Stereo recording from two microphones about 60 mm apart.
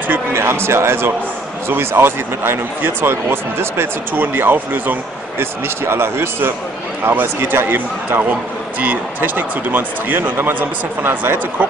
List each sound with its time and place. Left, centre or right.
0.3 s a man's voice: right